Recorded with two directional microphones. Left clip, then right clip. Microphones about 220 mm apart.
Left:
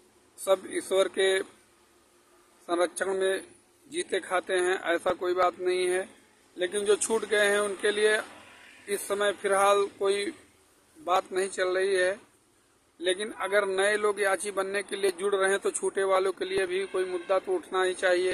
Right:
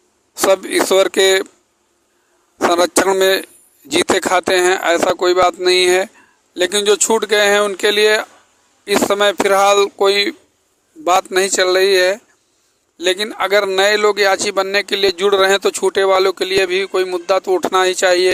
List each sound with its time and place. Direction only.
0.5 s a man's voice: 45° right (ahead or behind)
2.7 s a man's voice: 50° right (ahead or behind)